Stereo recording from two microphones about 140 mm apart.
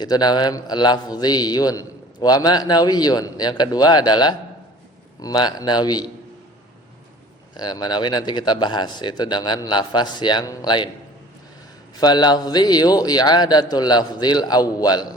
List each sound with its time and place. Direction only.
0.0 s a man's voice: 30° left (ahead or behind)
7.5 s speech: 30° left (ahead or behind)
11.9 s a man's voice: 30° left (ahead or behind)